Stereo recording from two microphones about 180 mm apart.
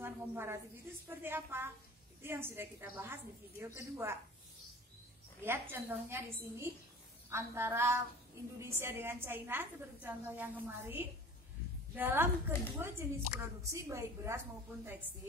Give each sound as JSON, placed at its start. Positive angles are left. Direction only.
{"t": 0.0, "sound": "a woman's voice", "side_deg": -10}
{"t": 5.4, "sound": "a woman's voice", "side_deg": -10}